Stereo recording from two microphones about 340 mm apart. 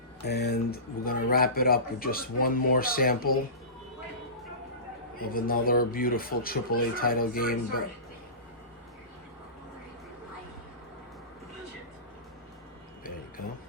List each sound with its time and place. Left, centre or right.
0.3 s speech: left
5.2 s speech: left